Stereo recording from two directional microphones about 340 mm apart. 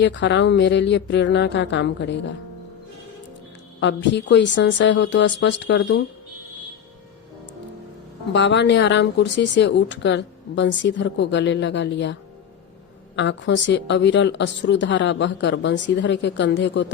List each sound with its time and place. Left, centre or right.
0.0 s speech: left
3.8 s speech: left
8.3 s speech: left
13.1 s speech: left